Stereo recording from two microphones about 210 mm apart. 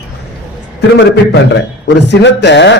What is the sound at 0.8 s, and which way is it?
A man's voice, 55° left (ahead or behind).